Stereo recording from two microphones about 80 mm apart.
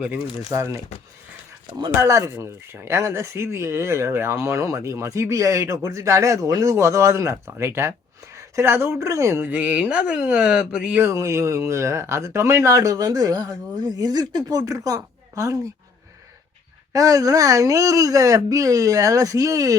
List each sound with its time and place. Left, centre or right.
0.5 s speech: right
2.0 s speech: right
9.4 s speech: centre
11.0 s speech: right
16.9 s speech: right